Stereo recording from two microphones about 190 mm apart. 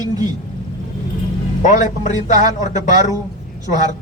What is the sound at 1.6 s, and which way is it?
Speech, 40° left (ahead or behind).